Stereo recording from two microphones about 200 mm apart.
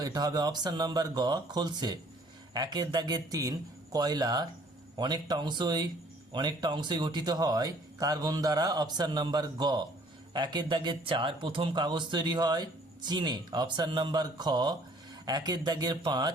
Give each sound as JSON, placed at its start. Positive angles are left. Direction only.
{"t": 0.0, "sound": "speech", "side_deg": -20}